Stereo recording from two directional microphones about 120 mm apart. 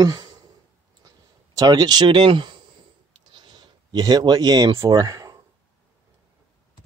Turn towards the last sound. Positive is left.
turn(degrees=-30)  # may be behind; listen again after turning